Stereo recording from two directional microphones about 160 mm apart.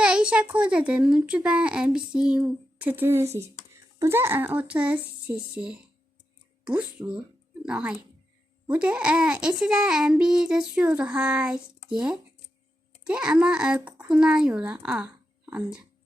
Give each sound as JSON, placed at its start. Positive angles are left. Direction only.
{"t": 0.0, "sound": "a child's voice", "side_deg": -5}